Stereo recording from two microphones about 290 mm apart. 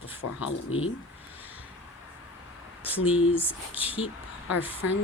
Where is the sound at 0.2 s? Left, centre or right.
Left.